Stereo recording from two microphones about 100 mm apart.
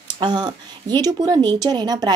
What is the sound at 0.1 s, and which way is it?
A woman's voice, 45° right (ahead or behind).